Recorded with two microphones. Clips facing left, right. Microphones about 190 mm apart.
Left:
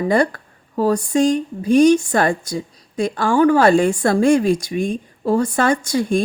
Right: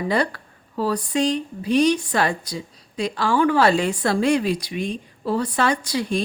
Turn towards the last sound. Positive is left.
turn(degrees=50)  # may be behind; listen again after turning